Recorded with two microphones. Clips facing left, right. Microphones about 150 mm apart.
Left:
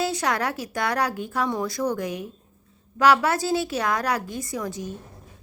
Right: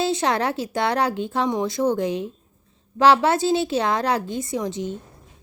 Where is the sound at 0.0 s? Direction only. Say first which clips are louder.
Right 3 dB; 25° right (ahead or behind).